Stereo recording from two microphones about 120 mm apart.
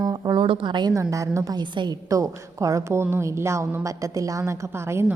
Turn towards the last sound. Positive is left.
turn(degrees=-20)  # may be behind; listen again after turning